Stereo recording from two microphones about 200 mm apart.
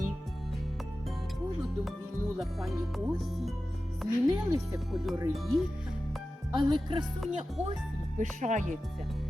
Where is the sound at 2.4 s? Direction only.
Centre (ahead or behind).